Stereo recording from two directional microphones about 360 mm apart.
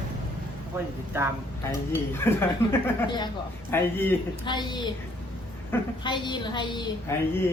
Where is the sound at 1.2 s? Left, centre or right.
Centre.